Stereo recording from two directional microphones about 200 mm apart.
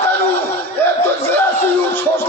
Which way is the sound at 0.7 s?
10° left (ahead or behind).